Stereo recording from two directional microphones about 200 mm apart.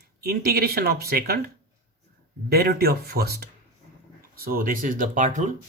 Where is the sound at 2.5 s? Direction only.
50° right (ahead or behind).